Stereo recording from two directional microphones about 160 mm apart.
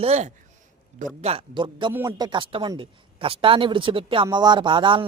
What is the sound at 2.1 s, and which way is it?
Speech, 25° right (ahead or behind).